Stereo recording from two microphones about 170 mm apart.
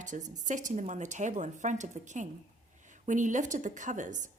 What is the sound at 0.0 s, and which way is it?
Speech, 45° right (ahead or behind).